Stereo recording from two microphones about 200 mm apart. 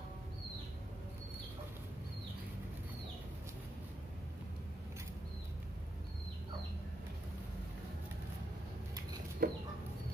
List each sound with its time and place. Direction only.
9.4 s chicken: 50° right (ahead or behind)